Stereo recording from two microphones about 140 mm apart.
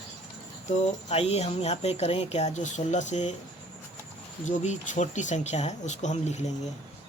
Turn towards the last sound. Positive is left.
turn(degrees=55)  # may be behind; listen again after turning